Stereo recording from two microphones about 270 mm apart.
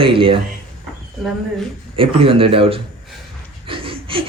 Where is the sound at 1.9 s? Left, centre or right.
Centre.